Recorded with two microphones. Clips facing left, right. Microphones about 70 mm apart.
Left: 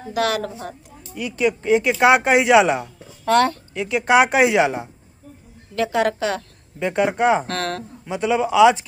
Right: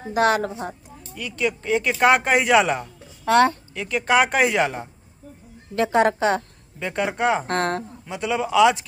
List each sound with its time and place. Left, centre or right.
0.1 s speech: right
1.1 s speech: centre
3.3 s speech: centre
3.7 s speech: centre
5.8 s speech: right
6.8 s speech: centre
7.4 s speech: right
8.0 s speech: centre